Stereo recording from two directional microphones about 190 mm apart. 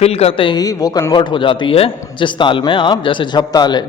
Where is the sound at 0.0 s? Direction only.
30° left (ahead or behind).